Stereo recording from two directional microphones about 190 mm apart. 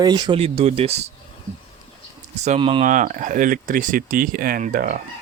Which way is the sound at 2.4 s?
30° right (ahead or behind).